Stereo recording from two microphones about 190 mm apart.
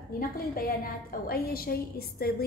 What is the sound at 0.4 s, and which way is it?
A woman's voice, 50° left (ahead or behind).